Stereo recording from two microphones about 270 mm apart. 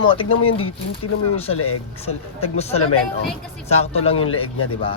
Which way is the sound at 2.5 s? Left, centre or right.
Left.